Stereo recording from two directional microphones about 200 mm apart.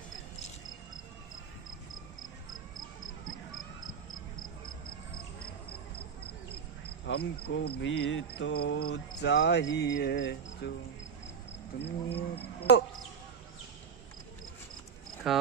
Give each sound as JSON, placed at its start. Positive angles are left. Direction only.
{"t": 3.3, "sound": "a sound", "side_deg": 80}
{"t": 7.1, "sound": "cricket", "side_deg": 55}
{"t": 11.8, "sound": "cricket", "side_deg": 55}
{"t": 15.3, "sound": "speech", "side_deg": 0}